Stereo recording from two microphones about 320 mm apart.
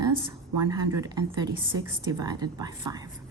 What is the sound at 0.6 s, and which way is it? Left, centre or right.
A woman's voice, centre.